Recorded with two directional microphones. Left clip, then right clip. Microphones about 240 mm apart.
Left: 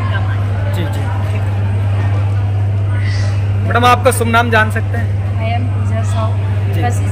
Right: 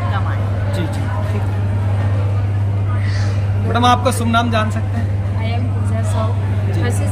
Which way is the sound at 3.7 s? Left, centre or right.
Centre.